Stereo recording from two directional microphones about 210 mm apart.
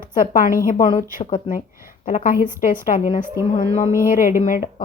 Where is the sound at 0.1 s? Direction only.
40° left (ahead or behind).